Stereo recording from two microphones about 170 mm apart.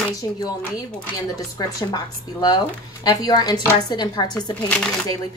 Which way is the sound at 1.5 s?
25° left (ahead or behind).